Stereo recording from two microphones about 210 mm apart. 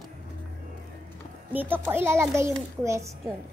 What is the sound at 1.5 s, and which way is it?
A child's voice, 10° right (ahead or behind).